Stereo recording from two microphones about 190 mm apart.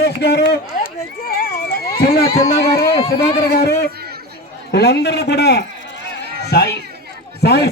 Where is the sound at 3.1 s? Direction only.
55° left (ahead or behind).